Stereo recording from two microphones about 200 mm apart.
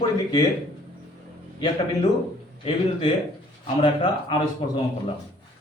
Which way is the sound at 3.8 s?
25° left (ahead or behind).